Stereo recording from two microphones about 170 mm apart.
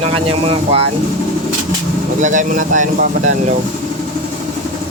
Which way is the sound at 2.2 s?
50° right (ahead or behind).